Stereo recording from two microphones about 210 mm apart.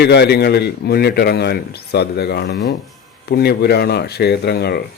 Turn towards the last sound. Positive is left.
turn(degrees=50)  # may be behind; listen again after turning